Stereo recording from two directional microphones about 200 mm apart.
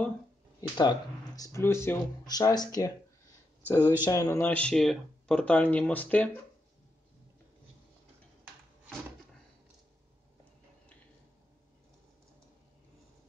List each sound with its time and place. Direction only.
0.6 s speech: 20° left (ahead or behind)